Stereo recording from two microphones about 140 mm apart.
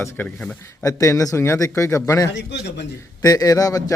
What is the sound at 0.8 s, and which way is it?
Speech, 25° left (ahead or behind).